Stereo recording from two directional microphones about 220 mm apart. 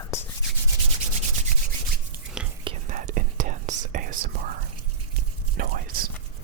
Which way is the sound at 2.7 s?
20° right (ahead or behind).